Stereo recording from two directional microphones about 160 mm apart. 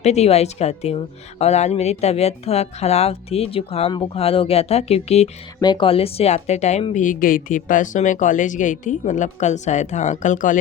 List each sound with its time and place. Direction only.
0.0 s a woman's voice: 45° left (ahead or behind)
5.5 s a woman's voice: 30° left (ahead or behind); by 6.8 s 45° left (ahead or behind)
6.9 s speech: 55° left (ahead or behind)